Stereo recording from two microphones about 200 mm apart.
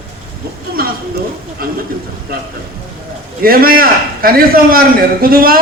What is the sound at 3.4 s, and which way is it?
A man's voice, 45° right (ahead or behind).